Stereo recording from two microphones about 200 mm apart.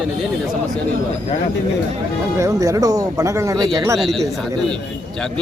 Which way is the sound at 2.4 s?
15° right (ahead or behind).